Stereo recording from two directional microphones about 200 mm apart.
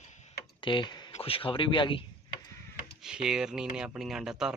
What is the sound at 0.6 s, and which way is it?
Speech, 25° left (ahead or behind).